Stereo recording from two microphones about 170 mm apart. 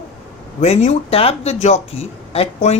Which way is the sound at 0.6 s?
40° left (ahead or behind).